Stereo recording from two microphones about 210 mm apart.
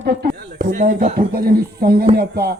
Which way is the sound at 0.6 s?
40° right (ahead or behind).